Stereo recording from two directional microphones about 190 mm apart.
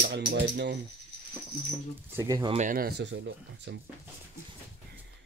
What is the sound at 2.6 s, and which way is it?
Speech, 50° right (ahead or behind).